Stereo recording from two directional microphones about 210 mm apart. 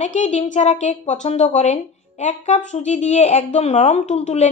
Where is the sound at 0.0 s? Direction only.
35° left (ahead or behind).